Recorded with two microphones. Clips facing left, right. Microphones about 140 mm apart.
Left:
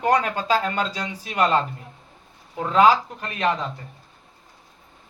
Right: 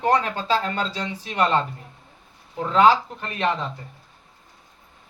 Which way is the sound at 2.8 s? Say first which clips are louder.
Even; 30° right (ahead or behind).